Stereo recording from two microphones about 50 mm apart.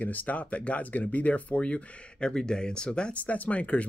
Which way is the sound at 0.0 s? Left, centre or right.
Left.